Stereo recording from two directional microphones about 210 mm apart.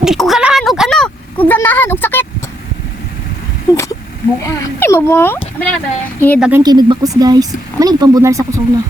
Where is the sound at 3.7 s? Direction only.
15° left (ahead or behind).